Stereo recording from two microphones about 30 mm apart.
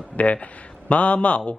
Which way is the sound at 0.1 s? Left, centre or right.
Left.